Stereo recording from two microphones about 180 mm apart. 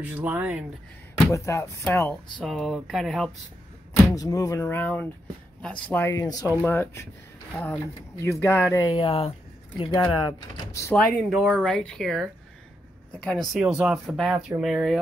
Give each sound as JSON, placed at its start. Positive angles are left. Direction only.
{"t": 0.0, "sound": "speech", "side_deg": -10}
{"t": 1.3, "sound": "speech", "side_deg": 15}
{"t": 2.4, "sound": "speech", "side_deg": 0}
{"t": 4.1, "sound": "speech", "side_deg": 20}
{"t": 8.8, "sound": "speech", "side_deg": 30}
{"t": 10.7, "sound": "speech", "side_deg": 15}
{"t": 11.2, "sound": "speech", "side_deg": 0}